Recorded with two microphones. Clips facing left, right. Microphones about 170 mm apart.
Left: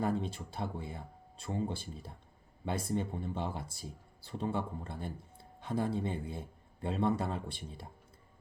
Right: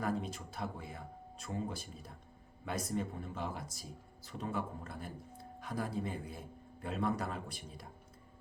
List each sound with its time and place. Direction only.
0.0 s speech: 30° left (ahead or behind)